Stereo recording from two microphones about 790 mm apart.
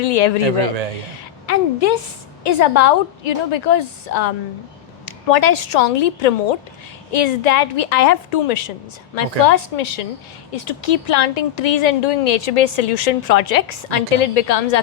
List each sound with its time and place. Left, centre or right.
0.0 s a woman's voice: left
1.5 s a woman's voice: left